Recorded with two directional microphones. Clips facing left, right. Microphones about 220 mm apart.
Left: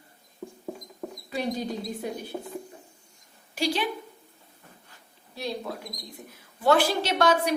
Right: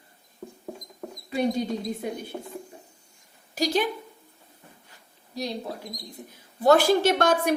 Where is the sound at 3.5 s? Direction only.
45° right (ahead or behind).